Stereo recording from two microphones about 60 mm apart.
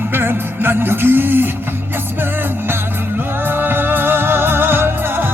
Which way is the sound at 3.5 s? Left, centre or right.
Right.